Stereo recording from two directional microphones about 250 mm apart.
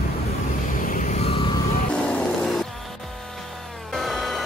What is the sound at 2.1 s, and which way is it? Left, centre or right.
Music, centre.